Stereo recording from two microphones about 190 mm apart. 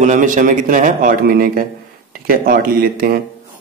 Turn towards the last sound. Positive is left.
turn(degrees=-50)  # may be behind; listen again after turning